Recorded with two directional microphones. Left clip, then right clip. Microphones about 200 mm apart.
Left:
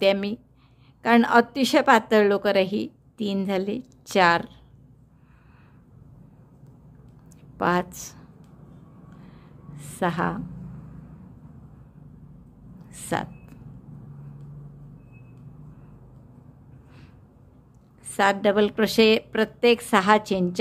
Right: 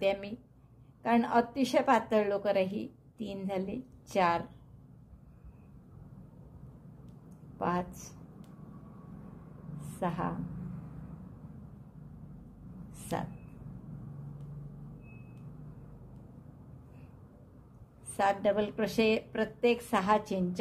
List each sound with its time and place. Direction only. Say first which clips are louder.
0.0 s a woman's voice: left 10 dB; 35° left (ahead or behind)
7.2 s a sound: left 10 dB; 35° left (ahead or behind)
9.9 s a woman's voice: left 9 dB; 35° left (ahead or behind)
13.1 s a woman's voice: left 9 dB; 35° left (ahead or behind)
18.1 s a woman's voice: left 8 dB; 35° left (ahead or behind)